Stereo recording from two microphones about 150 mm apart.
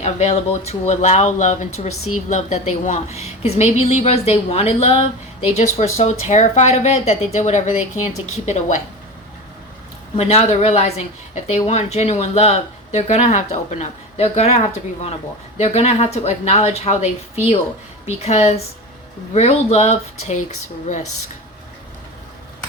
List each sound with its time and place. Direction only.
0.0 s speech: 50° left (ahead or behind)
10.2 s speech: 45° left (ahead or behind)